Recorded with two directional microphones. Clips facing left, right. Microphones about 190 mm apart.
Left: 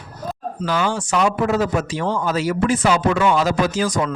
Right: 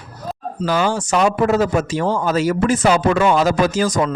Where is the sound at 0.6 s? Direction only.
45° right (ahead or behind).